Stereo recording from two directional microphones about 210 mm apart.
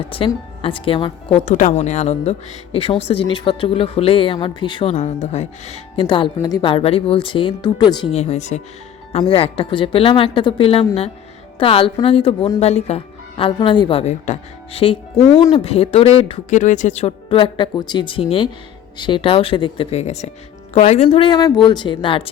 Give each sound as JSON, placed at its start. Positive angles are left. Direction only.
{"t": 0.1, "sound": "speech", "side_deg": 25}